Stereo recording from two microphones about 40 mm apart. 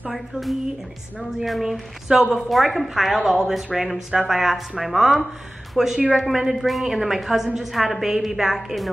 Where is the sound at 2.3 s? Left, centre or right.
Centre.